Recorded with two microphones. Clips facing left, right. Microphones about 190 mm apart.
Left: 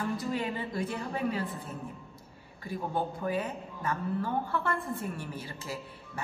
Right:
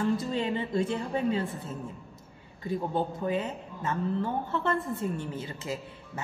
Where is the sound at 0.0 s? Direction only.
25° right (ahead or behind).